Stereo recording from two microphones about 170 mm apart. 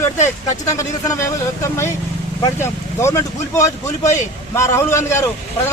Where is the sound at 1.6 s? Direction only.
15° left (ahead or behind).